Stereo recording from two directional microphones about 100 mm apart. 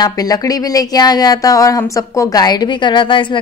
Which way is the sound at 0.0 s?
40° left (ahead or behind).